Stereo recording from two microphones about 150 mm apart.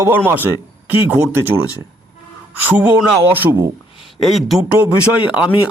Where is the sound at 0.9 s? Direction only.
15° right (ahead or behind).